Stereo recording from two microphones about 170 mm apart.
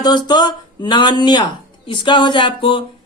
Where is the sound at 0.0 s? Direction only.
25° left (ahead or behind).